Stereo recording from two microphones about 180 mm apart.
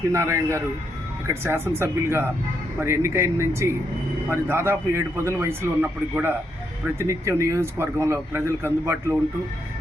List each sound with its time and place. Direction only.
0.1 s speech: 15° right (ahead or behind)